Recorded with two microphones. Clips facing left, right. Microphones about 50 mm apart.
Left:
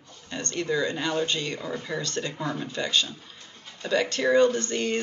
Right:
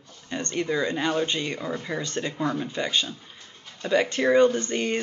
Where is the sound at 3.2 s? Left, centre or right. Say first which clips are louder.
Even; centre.